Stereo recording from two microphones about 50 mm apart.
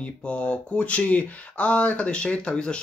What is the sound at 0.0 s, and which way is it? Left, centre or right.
Speech, left.